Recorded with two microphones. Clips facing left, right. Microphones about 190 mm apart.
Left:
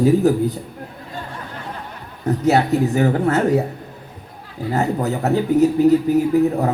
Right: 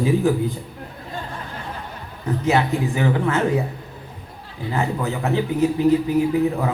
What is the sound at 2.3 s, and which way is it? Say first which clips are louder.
A man's voice: left 4 dB; 40° left (ahead or behind).